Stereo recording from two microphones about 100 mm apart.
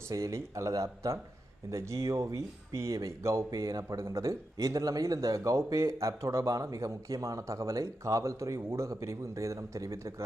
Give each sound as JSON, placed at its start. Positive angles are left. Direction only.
{"t": 0.1, "sound": "speech", "side_deg": -30}